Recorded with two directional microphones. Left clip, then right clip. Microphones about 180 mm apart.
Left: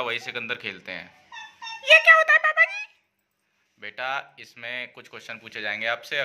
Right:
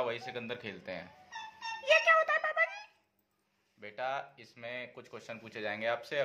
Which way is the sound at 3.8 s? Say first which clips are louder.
Left 7 dB; centre (ahead or behind).